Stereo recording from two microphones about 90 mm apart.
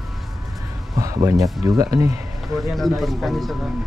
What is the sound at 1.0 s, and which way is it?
Speech, 40° right (ahead or behind).